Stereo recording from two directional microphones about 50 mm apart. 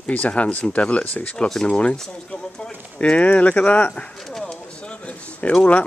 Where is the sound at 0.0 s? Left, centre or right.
Left.